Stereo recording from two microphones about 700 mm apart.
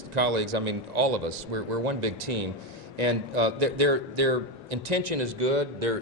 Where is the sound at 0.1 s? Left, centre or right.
Right.